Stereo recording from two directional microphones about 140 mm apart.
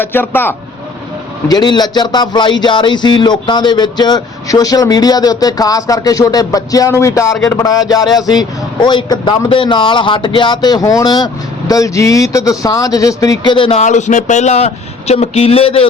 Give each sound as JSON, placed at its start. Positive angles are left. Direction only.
{"t": 0.0, "sound": "speech", "side_deg": 15}
{"t": 1.5, "sound": "speech", "side_deg": 30}
{"t": 13.7, "sound": "speech", "side_deg": 60}